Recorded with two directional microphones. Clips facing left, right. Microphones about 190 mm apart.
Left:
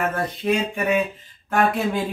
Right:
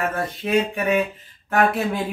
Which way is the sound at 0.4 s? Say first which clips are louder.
Right 1 dB; 5° right (ahead or behind).